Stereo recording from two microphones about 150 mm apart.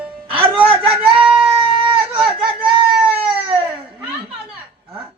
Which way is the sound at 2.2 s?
35° right (ahead or behind).